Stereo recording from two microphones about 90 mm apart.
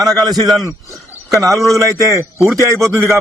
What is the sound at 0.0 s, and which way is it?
A man's voice, 45° right (ahead or behind).